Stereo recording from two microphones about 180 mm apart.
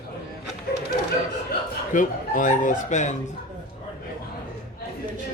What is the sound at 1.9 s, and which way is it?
Speech, 45° left (ahead or behind).